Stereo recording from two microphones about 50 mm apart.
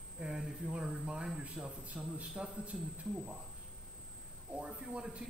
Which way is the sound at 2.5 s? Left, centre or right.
Right.